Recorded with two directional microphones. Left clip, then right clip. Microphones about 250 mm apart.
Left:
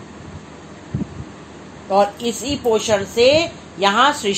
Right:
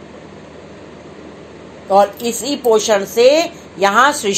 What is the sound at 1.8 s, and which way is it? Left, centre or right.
A woman's voice, centre.